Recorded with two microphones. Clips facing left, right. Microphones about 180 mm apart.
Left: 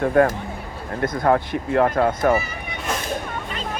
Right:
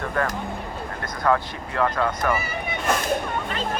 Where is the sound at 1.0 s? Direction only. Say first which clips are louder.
Left 4 dB; 25° left (ahead or behind).